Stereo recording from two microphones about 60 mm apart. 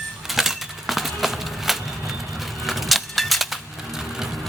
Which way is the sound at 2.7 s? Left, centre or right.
Centre.